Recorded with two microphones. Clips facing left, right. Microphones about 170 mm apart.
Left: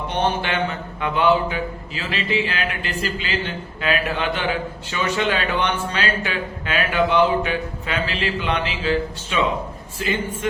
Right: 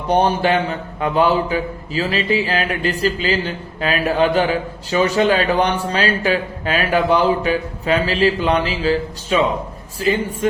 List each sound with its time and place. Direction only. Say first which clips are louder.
0.1 s a man's voice: right 8 dB; 40° right (ahead or behind)